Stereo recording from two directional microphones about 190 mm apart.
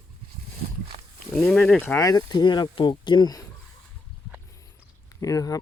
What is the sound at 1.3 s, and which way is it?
Speech, 5° left (ahead or behind).